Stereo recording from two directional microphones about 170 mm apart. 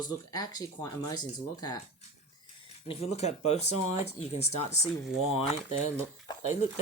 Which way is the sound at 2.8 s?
40° left (ahead or behind).